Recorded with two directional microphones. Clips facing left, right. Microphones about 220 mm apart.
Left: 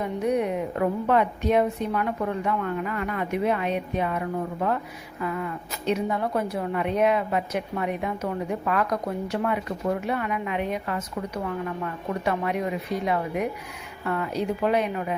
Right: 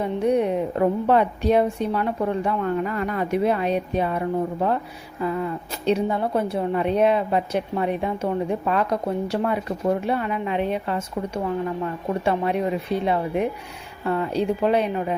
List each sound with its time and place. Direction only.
0.0 s a woman's voice: 30° right (ahead or behind)
12.2 s a woman's voice: 30° right (ahead or behind)